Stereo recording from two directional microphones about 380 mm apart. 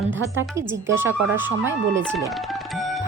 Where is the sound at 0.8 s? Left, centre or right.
Centre.